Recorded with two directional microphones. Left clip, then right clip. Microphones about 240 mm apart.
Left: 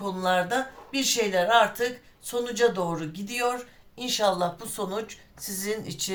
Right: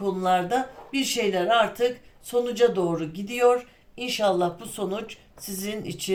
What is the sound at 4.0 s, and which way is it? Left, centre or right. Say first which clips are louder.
Speech: right 1 dB; left.